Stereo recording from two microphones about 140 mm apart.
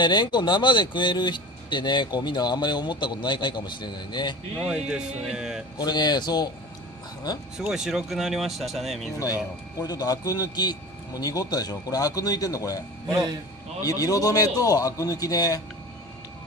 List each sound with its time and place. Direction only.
0.0 s speech: 30° left (ahead or behind)
4.6 s speech: 5° right (ahead or behind)
5.8 s speech: 30° left (ahead or behind)
7.5 s speech: 5° right (ahead or behind)
9.2 s speech: 25° left (ahead or behind)
13.8 s speech: 25° left (ahead or behind)